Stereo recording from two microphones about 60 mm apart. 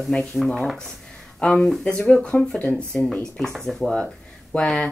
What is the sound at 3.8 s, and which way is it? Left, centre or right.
Speech, centre.